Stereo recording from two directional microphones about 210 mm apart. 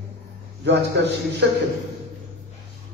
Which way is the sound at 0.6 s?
55° right (ahead or behind).